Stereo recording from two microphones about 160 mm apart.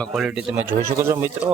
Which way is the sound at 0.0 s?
Centre (ahead or behind).